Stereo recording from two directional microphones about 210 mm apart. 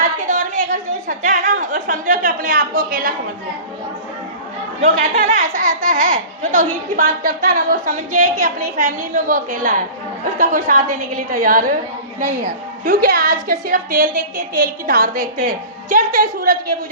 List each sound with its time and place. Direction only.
0.3 s chatter: 40° right (ahead or behind)
4.8 s a woman's voice: 35° right (ahead or behind)
12.8 s a woman's voice: 45° right (ahead or behind)